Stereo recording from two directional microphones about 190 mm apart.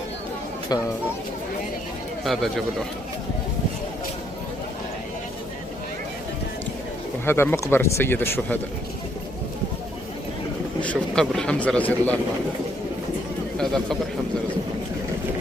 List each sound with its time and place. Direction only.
0.7 s speech: 20° left (ahead or behind)
2.2 s speech: centre (ahead or behind)
7.3 s speech: 10° left (ahead or behind)
10.8 s speech: 5° left (ahead or behind)
13.6 s speech: centre (ahead or behind)